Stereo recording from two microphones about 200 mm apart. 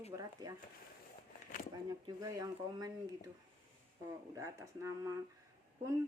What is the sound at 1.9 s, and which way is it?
A woman's voice, 15° right (ahead or behind).